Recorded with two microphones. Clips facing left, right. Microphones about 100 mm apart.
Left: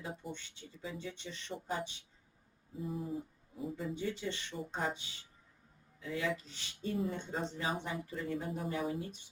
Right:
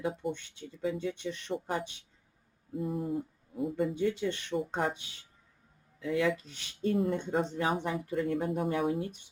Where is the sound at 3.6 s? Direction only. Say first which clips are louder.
Right 9 dB; 60° right (ahead or behind).